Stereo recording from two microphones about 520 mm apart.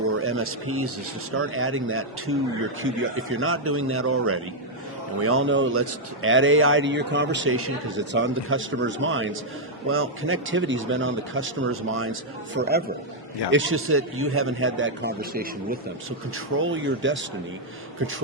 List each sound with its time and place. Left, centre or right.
0.2 s a man's voice: right